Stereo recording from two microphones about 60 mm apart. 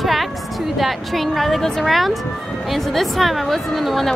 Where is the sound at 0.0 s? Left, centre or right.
Centre.